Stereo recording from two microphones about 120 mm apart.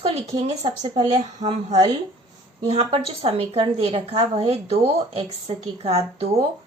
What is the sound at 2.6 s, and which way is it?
A woman's voice, 55° right (ahead or behind).